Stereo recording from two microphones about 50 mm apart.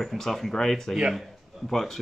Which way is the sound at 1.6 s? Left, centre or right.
Centre.